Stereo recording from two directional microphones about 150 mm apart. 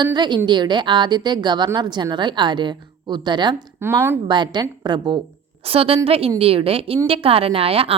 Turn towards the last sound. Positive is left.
turn(degrees=-40)  # may be behind; listen again after turning